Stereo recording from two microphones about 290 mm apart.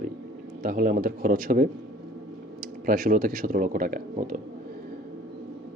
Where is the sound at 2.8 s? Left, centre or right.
Right.